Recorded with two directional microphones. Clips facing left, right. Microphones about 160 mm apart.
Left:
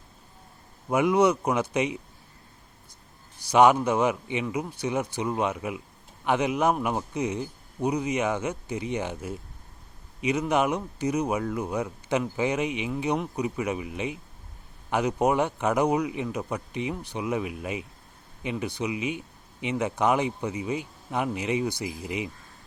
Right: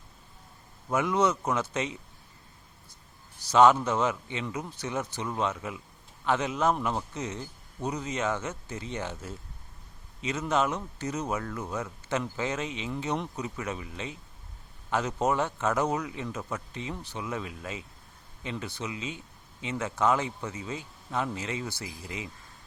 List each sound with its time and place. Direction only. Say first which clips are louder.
0.9 s speech: left 5 dB; 15° left (ahead or behind)
3.5 s speech: left 2 dB; 15° left (ahead or behind)